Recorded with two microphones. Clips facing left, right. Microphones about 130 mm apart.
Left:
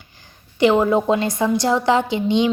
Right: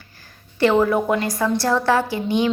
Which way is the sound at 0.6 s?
15° left (ahead or behind).